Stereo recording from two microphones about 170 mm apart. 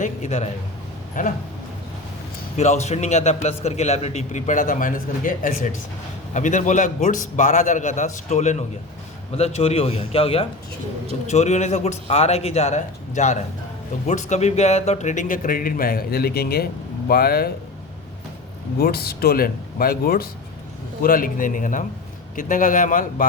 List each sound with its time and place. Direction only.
0.0 s a man's voice: 45° left (ahead or behind)
2.6 s a man's voice: 40° left (ahead or behind); by 17.5 s 65° left (ahead or behind)
18.8 s a man's voice: 65° left (ahead or behind)